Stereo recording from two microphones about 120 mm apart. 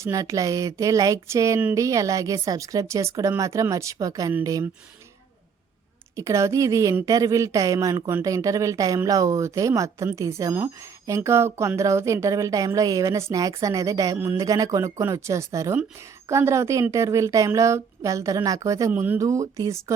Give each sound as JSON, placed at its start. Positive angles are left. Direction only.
{"t": 0.0, "sound": "a woman's voice", "side_deg": -25}
{"t": 6.1, "sound": "a woman's voice", "side_deg": -25}